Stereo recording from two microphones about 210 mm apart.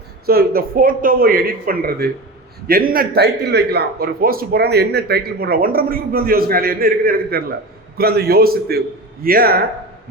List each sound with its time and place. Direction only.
0.3 s a man's voice: 45° right (ahead or behind)